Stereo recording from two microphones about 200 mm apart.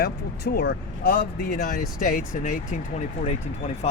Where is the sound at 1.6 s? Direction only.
45° left (ahead or behind).